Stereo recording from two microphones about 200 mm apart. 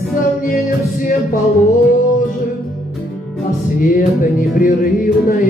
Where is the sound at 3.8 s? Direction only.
45° left (ahead or behind).